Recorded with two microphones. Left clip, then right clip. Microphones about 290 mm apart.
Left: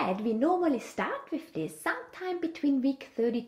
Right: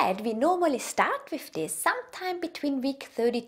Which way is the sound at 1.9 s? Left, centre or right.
Right.